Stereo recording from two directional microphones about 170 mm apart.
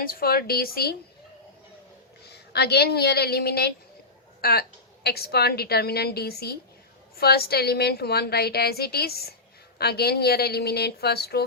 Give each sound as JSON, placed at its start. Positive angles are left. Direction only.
{"t": 0.0, "sound": "a woman's voice", "side_deg": 60}
{"t": 2.2, "sound": "a woman's voice", "side_deg": 75}